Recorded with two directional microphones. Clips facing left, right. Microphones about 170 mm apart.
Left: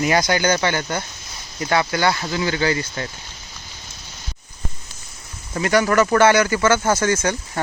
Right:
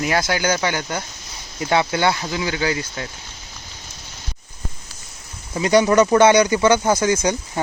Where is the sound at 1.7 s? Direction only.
20° right (ahead or behind).